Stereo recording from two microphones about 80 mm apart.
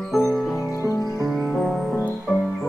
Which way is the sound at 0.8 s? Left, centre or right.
Left.